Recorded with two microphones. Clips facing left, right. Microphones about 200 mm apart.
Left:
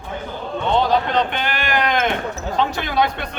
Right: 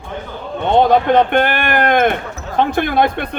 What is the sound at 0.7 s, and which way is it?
Speech, 55° right (ahead or behind).